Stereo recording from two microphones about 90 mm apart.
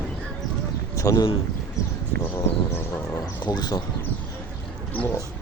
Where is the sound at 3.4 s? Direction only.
50° left (ahead or behind).